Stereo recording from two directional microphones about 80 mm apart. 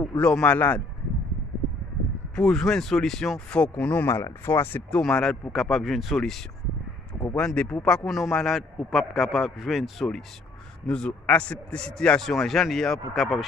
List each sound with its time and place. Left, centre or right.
0.2 s speech: centre
2.3 s speech: centre
4.1 s speech: left
5.0 s a man's voice: centre